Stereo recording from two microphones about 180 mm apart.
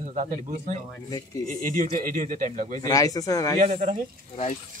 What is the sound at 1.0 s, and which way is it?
Speech, 20° left (ahead or behind).